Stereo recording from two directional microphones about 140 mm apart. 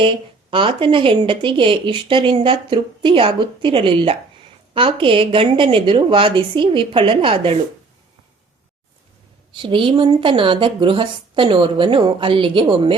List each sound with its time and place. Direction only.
0.5 s speech: 40° right (ahead or behind)
9.6 s speech: 35° right (ahead or behind)